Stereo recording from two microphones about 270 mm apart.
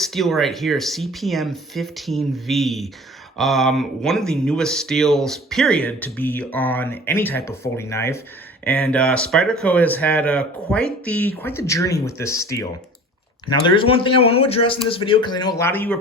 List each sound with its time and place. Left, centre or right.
0.0 s a man's voice: centre